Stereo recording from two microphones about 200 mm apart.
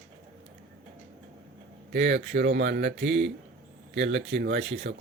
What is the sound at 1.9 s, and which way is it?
Speech, 60° right (ahead or behind).